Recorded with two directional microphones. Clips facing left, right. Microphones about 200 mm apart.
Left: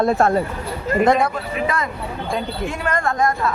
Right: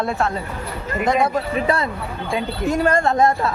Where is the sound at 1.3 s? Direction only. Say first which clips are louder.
Right 3 dB; 35° right (ahead or behind).